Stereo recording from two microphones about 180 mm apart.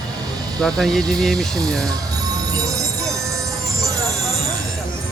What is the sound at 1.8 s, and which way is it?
Music, 20° right (ahead or behind).